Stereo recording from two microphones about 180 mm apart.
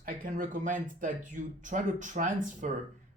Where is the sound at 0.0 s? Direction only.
50° right (ahead or behind).